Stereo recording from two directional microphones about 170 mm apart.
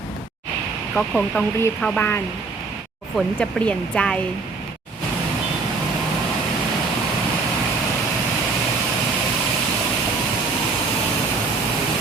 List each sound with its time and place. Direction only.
0.9 s speech: 5° left (ahead or behind)